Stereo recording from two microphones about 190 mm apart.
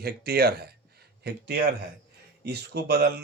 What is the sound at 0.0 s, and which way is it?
Speech, 55° right (ahead or behind).